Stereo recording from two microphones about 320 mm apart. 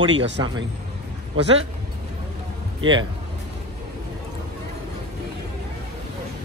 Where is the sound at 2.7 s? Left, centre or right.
Right.